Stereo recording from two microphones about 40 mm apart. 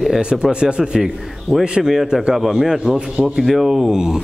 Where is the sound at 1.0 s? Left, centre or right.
Centre.